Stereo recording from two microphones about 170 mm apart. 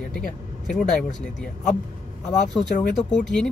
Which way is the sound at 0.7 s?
5° left (ahead or behind).